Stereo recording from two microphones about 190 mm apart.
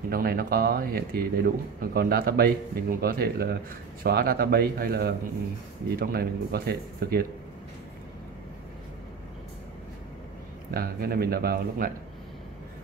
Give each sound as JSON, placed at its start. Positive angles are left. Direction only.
{"t": 0.1, "sound": "speech", "side_deg": -50}
{"t": 10.7, "sound": "speech", "side_deg": -55}